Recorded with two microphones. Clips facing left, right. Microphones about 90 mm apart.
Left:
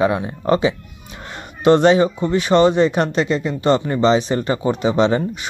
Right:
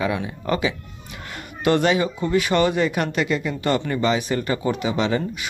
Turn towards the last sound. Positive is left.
turn(degrees=30)  # may be behind; listen again after turning